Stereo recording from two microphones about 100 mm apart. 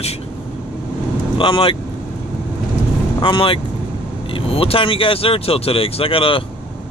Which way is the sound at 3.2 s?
65° left (ahead or behind).